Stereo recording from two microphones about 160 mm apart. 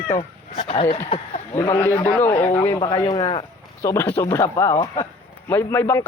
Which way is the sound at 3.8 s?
15° left (ahead or behind).